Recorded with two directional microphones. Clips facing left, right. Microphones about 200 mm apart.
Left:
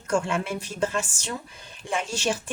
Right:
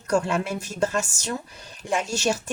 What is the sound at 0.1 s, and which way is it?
Speech, 40° right (ahead or behind).